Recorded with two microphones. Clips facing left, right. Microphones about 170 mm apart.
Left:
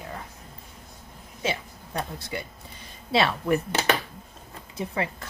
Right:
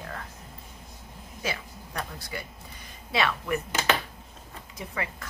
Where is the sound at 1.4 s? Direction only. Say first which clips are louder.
Left 4 dB; 25° left (ahead or behind).